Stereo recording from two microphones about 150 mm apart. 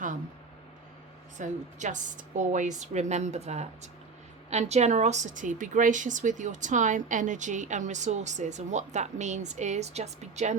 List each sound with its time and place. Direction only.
1.4 s a woman's voice: 55° right (ahead or behind)